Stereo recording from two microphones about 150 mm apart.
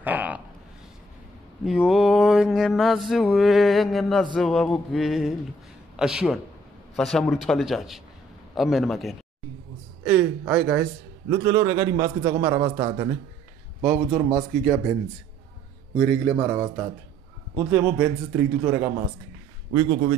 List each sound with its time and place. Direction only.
0.0 s a sound: 10° right (ahead or behind)
1.6 s a sound: 5° right (ahead or behind)
10.0 s a man's voice: 10° right (ahead or behind)
11.4 s a man's voice: 20° right (ahead or behind)
12.2 s a man's voice: 30° right (ahead or behind)
14.1 s a man's voice: 20° right (ahead or behind)
16.0 s a man's voice: 10° left (ahead or behind)
16.3 s a man's voice: 20° right (ahead or behind)
19.7 s a man's voice: 30° right (ahead or behind)